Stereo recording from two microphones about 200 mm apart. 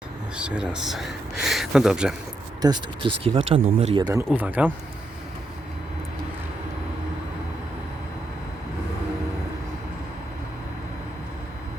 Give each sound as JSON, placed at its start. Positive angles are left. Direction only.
{"t": 0.3, "sound": "speech", "side_deg": -5}
{"t": 2.6, "sound": "speech", "side_deg": -25}
{"t": 4.4, "sound": "speech", "side_deg": -10}